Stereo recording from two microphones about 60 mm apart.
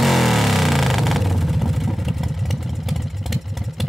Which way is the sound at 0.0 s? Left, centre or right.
Centre.